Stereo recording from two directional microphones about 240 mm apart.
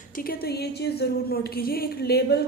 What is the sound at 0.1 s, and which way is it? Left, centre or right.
Speech, left.